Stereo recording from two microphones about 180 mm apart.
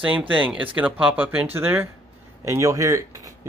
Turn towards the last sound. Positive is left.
turn(degrees=-20)  # may be behind; listen again after turning